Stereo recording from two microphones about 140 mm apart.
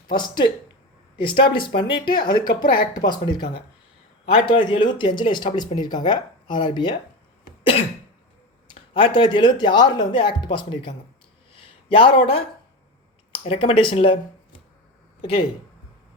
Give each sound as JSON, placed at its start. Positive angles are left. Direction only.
{"t": 0.1, "sound": "speech", "side_deg": 30}
{"t": 8.6, "sound": "speech", "side_deg": 40}
{"t": 11.5, "sound": "a sound", "side_deg": 40}
{"t": 13.4, "sound": "speech", "side_deg": 40}